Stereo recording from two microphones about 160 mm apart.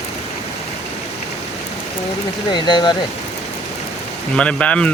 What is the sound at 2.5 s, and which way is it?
Speech, 30° left (ahead or behind).